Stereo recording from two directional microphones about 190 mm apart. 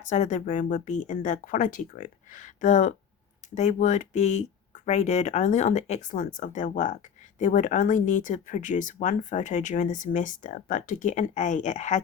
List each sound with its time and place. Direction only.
0.1 s speech: 40° left (ahead or behind)